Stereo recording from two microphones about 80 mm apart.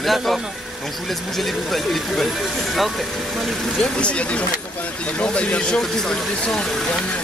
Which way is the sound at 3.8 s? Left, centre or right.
Centre.